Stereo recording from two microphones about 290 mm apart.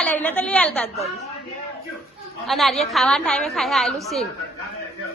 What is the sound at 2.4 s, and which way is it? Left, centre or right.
A woman's voice, centre.